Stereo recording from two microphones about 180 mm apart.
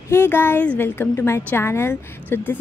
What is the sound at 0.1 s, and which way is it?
A woman's voice, 10° left (ahead or behind).